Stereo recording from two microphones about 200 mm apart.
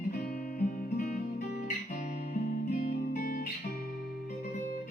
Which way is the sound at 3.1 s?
45° left (ahead or behind).